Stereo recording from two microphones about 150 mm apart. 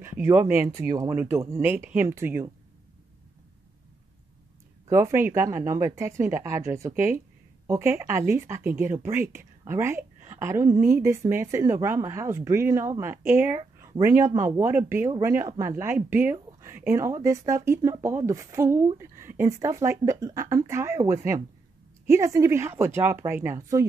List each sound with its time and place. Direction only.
0.0 s speech: 15° right (ahead or behind)
4.8 s a woman's voice: 20° right (ahead or behind)